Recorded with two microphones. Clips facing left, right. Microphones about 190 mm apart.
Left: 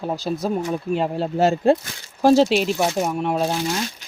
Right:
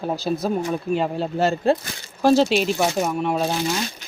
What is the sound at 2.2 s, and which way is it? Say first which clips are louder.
Speech: left 2 dB; 40° left (ahead or behind).